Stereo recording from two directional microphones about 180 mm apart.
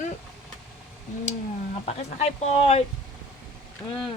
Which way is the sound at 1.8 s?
35° left (ahead or behind).